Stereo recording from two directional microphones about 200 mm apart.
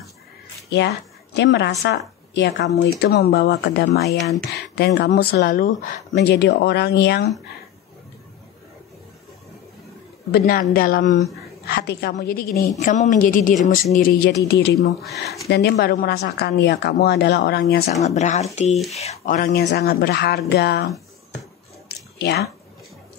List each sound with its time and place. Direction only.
0.7 s a woman's voice: 60° left (ahead or behind)
10.3 s a woman's voice: 50° left (ahead or behind)
15.0 s speech: centre (ahead or behind)
15.4 s a woman's voice: 55° left (ahead or behind)
18.0 s speech: 35° left (ahead or behind)
19.6 s speech: 55° left (ahead or behind)
21.8 s a sound: 55° left (ahead or behind)